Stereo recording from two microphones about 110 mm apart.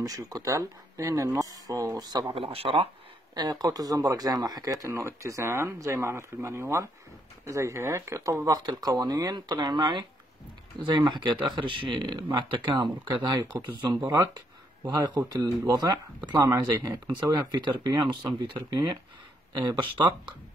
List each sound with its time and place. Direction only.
0.0 s speech: 35° right (ahead or behind)
2.3 s speech: 60° right (ahead or behind)
3.3 s speech: 40° right (ahead or behind)